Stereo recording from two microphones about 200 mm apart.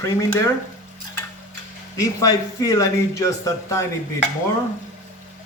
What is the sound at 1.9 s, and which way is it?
Speech, 20° left (ahead or behind).